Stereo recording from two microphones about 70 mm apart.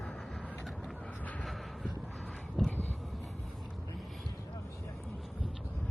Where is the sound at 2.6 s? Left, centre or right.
Centre.